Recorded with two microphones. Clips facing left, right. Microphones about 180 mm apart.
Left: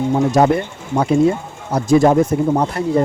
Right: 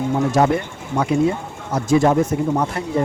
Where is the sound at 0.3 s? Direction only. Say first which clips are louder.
Left 3 dB; 40° left (ahead or behind).